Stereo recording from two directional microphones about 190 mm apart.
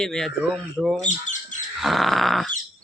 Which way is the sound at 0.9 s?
40° left (ahead or behind).